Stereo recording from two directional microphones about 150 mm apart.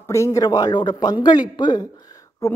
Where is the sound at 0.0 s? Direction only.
20° left (ahead or behind).